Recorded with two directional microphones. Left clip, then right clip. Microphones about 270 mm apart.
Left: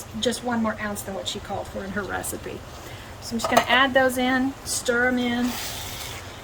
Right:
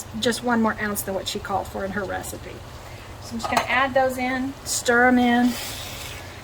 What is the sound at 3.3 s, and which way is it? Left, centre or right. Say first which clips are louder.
Speech: left 2 dB; left.